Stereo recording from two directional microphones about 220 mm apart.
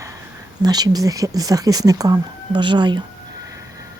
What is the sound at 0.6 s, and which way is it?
Speech, 20° right (ahead or behind).